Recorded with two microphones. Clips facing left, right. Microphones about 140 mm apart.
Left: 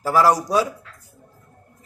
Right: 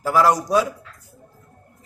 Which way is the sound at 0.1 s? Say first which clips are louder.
Even; 5° left (ahead or behind).